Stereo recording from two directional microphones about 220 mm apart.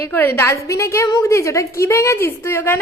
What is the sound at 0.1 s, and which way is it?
A woman's voice, 10° left (ahead or behind).